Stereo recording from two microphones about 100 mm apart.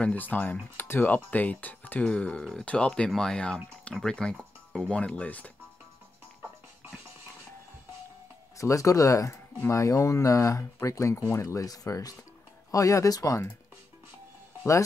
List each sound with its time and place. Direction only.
0.0 s speech: 15° left (ahead or behind)
8.5 s speech: 30° left (ahead or behind)